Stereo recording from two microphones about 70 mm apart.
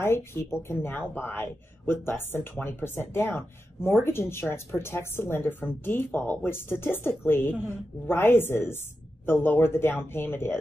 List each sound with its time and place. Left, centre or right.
0.0 s speech: left